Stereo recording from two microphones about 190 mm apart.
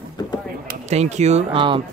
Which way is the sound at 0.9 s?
35° right (ahead or behind).